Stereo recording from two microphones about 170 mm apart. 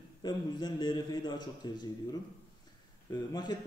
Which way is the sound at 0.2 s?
25° left (ahead or behind).